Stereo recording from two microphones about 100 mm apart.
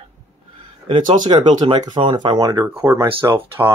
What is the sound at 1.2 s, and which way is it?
Speech, 50° right (ahead or behind).